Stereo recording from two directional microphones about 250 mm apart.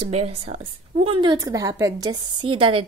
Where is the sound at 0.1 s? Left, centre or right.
Right.